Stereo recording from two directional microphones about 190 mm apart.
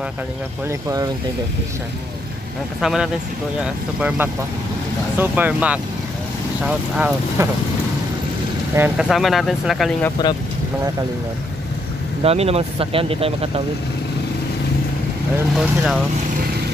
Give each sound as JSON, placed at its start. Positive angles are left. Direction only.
{"t": 0.7, "sound": "speech", "side_deg": -15}
{"t": 2.8, "sound": "speech", "side_deg": -5}
{"t": 8.7, "sound": "speech", "side_deg": -5}
{"t": 12.2, "sound": "speech", "side_deg": -30}
{"t": 15.5, "sound": "speech", "side_deg": 0}